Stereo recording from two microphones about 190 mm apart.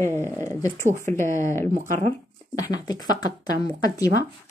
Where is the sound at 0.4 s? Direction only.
15° left (ahead or behind).